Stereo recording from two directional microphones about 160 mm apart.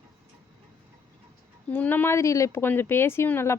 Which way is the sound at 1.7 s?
10° left (ahead or behind).